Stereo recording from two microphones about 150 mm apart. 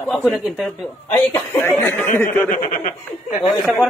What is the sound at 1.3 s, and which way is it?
Speech, 15° left (ahead or behind).